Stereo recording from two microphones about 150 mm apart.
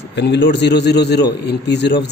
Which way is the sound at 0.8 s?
90° left.